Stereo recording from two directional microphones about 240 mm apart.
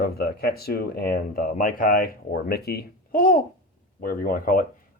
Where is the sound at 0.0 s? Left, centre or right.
Left.